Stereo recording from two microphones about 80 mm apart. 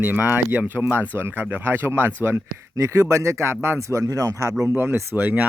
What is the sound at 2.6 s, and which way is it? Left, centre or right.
Speech, right.